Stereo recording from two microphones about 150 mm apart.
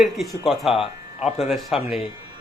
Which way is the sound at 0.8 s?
45° left (ahead or behind).